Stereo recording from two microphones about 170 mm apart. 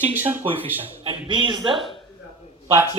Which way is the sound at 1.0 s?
30° right (ahead or behind).